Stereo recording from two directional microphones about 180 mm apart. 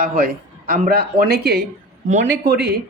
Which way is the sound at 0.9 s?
60° right (ahead or behind).